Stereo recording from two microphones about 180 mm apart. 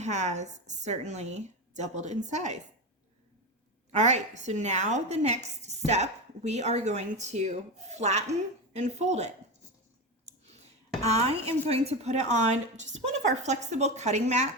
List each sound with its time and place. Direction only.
0.0 s speech: 40° right (ahead or behind)
3.9 s speech: 40° right (ahead or behind)
10.2 s clicking: 35° right (ahead or behind)
11.0 s speech: 35° right (ahead or behind)